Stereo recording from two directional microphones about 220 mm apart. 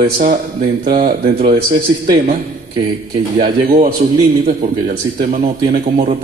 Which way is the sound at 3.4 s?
40° right (ahead or behind).